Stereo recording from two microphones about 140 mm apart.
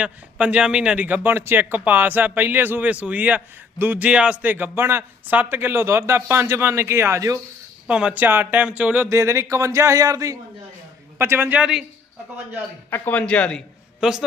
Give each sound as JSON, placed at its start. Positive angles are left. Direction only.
{"t": 0.0, "sound": "a man's voice", "side_deg": -10}
{"t": 7.9, "sound": "a man's voice", "side_deg": -5}
{"t": 9.0, "sound": "a man's voice", "side_deg": -20}
{"t": 12.9, "sound": "speech", "side_deg": 10}
{"t": 14.0, "sound": "a man's voice", "side_deg": -5}